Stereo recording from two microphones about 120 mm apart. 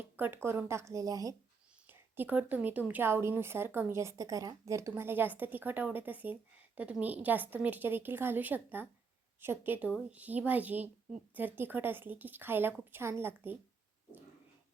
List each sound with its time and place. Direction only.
0.4 s a woman's voice: 20° right (ahead or behind)
1.9 s a woman's voice: 15° right (ahead or behind)